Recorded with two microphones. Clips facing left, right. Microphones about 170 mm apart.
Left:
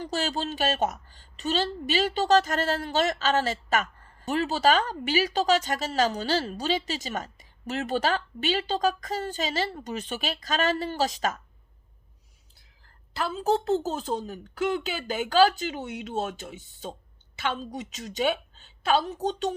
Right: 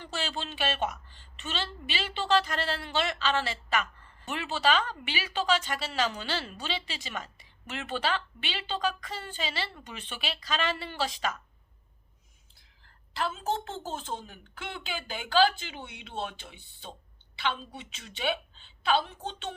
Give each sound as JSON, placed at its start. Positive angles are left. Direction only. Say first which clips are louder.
{"t": 0.0, "sound": "a woman's voice", "louder": "left 6 dB", "side_deg": 40}
{"t": 12.8, "sound": "a woman's voice", "louder": "left 2 dB", "side_deg": 35}